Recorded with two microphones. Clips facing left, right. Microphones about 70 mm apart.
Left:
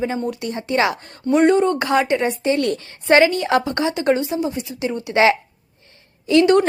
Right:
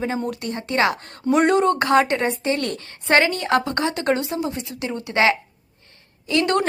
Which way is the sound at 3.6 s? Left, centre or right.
Centre.